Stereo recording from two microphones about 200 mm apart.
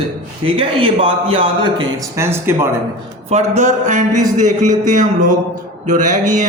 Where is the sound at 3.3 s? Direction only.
35° right (ahead or behind).